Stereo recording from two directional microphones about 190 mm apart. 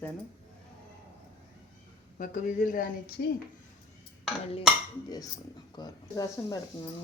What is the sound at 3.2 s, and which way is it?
Speech, 60° left (ahead or behind).